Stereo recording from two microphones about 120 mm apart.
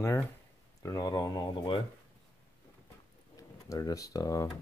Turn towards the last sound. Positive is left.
turn(degrees=30)  # may be behind; listen again after turning